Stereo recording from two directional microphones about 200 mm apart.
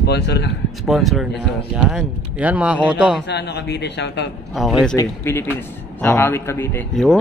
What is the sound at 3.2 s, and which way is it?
A man's voice, 55° left (ahead or behind).